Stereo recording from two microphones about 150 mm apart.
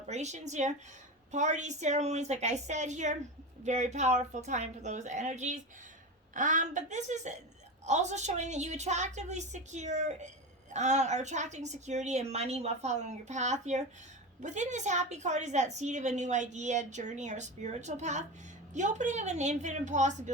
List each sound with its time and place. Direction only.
0.1 s a woman's voice: 50° right (ahead or behind)